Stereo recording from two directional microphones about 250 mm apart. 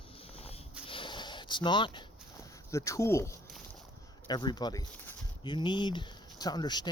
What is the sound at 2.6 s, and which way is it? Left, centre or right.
Speech, centre.